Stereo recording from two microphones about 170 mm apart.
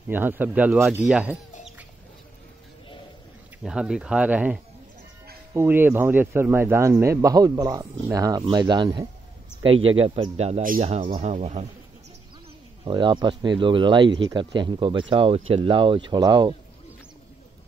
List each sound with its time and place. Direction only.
0.1 s speech: 10° right (ahead or behind)
3.6 s speech: 5° right (ahead or behind); by 11.6 s 40° right (ahead or behind)
12.8 s speech: 25° right (ahead or behind)